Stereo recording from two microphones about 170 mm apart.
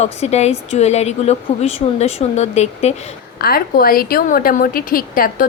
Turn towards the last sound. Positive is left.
turn(degrees=55)  # may be behind; listen again after turning